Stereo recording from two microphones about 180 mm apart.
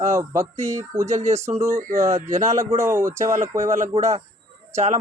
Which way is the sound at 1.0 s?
40° right (ahead or behind).